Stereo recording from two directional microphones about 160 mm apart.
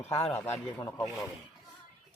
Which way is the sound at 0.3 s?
15° left (ahead or behind).